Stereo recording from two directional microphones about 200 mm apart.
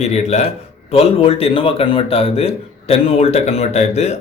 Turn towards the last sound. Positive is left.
turn(degrees=35)  # may be behind; listen again after turning